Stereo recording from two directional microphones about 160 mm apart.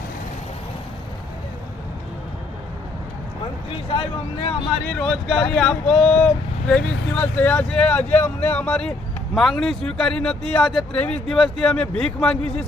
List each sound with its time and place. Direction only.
3.8 s speech: 35° left (ahead or behind)
4.9 s speech: 5° left (ahead or behind)